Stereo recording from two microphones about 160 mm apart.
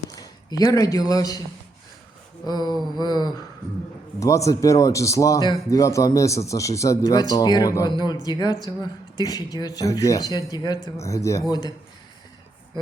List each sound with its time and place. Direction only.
0.1 s a man's voice: 25° left (ahead or behind)
2.5 s speech: 25° left (ahead or behind)